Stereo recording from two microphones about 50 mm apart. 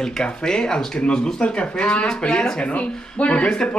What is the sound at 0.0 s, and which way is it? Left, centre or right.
A woman's voice, centre.